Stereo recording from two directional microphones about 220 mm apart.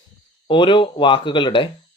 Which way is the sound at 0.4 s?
20° left (ahead or behind).